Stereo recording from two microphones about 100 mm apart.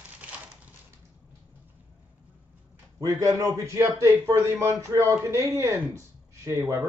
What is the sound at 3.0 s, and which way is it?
A man's voice, 35° right (ahead or behind).